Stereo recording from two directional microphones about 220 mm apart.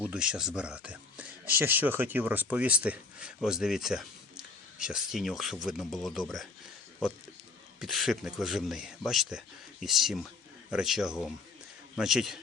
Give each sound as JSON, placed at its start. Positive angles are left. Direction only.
{"t": 0.1, "sound": "speech", "side_deg": -5}
{"t": 7.8, "sound": "speech", "side_deg": 0}